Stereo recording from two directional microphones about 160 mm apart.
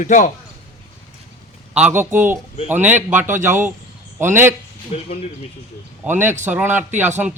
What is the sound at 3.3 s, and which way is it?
Speech, 50° right (ahead or behind).